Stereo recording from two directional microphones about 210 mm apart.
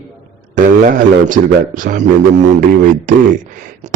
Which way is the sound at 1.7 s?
40° right (ahead or behind).